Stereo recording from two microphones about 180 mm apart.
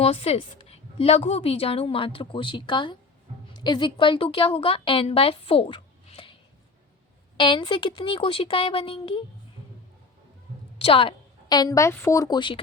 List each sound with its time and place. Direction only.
0.0 s a woman's voice: 35° left (ahead or behind)
7.3 s a woman's voice: 25° left (ahead or behind)
10.8 s a woman's voice: 30° left (ahead or behind)